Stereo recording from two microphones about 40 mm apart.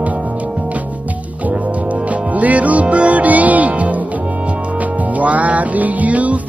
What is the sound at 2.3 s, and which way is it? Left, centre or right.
Music, right.